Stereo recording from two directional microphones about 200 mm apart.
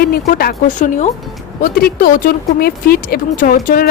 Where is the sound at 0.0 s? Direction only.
50° left (ahead or behind).